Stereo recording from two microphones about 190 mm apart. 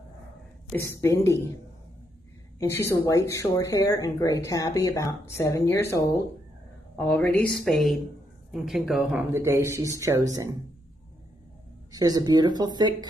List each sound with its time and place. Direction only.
0.7 s speech: 15° left (ahead or behind)
2.7 s speech: 15° left (ahead or behind); by 9.2 s centre (ahead or behind)
9.3 s speech: 15° right (ahead or behind)
11.9 s speech: 20° right (ahead or behind)